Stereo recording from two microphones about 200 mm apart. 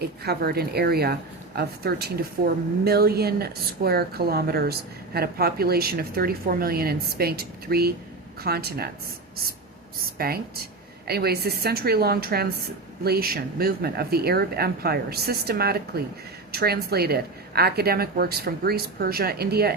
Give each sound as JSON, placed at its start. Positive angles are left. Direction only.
{"t": 0.2, "sound": "a woman's voice", "side_deg": -50}
{"t": 10.2, "sound": "a woman's voice", "side_deg": -50}